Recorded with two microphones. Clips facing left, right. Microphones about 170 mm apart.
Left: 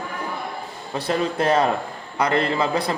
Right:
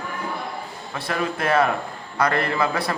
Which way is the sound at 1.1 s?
25° left (ahead or behind).